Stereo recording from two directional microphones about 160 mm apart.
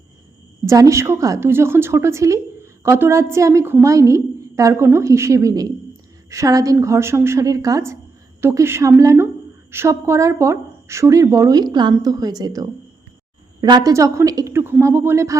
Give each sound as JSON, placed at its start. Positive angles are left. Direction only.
{"t": 0.6, "sound": "a woman's voice", "side_deg": -20}